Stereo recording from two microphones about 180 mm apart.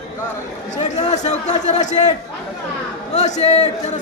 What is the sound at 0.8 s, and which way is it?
A man's voice, 40° left (ahead or behind).